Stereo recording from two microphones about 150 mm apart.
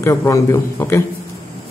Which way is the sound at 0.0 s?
20° left (ahead or behind).